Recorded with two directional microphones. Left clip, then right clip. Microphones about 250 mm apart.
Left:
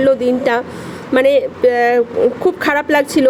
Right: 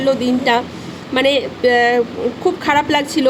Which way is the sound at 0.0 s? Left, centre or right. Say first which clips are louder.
Left 3 dB; centre.